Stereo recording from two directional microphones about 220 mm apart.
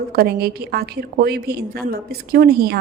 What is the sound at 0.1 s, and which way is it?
A woman's voice, 45° right (ahead or behind).